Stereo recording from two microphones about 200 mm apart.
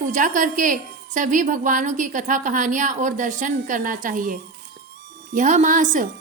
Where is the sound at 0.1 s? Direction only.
40° right (ahead or behind).